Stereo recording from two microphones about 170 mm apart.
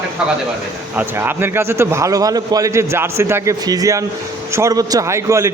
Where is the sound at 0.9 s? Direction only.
15° right (ahead or behind).